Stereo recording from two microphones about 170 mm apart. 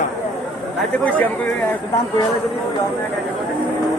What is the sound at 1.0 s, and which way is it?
Speech, 10° left (ahead or behind).